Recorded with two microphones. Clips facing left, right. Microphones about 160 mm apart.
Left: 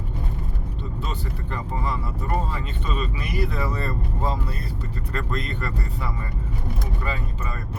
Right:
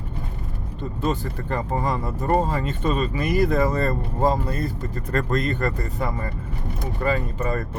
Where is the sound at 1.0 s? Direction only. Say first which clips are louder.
Right 11 dB; 45° right (ahead or behind).